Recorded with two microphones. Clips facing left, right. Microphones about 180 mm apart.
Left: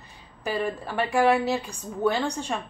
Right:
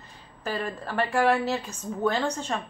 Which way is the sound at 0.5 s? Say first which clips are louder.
Left 2 dB; 10° left (ahead or behind).